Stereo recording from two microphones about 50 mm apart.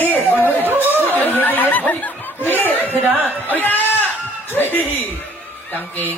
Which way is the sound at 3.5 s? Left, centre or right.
Left.